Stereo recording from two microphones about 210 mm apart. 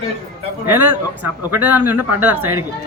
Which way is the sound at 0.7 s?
10° right (ahead or behind).